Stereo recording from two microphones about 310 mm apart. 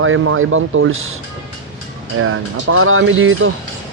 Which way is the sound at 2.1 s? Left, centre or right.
Right.